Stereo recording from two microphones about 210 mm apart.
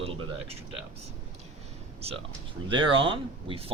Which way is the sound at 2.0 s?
30° right (ahead or behind).